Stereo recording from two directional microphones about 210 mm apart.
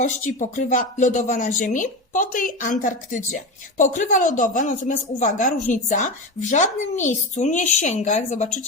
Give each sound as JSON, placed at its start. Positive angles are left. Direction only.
{"t": 0.3, "sound": "speech", "side_deg": 35}